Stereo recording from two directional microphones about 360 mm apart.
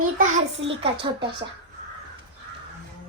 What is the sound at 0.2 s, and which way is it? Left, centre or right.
Speech, right.